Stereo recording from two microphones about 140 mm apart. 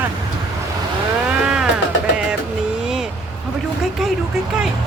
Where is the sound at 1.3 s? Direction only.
5° right (ahead or behind).